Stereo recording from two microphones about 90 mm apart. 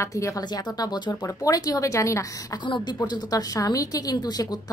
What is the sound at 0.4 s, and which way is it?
Speech, 50° left (ahead or behind).